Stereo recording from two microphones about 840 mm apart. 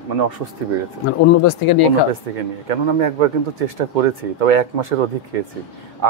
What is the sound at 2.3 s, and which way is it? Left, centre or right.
A man's voice, right.